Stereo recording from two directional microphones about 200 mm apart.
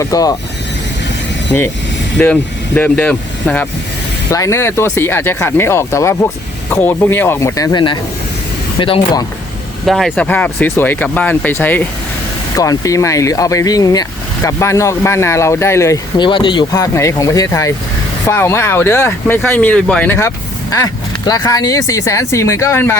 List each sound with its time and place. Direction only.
0.0 s speech: 20° left (ahead or behind)
1.5 s speech: 10° left (ahead or behind); by 9.2 s 25° left (ahead or behind)
9.8 s speech: centre (ahead or behind)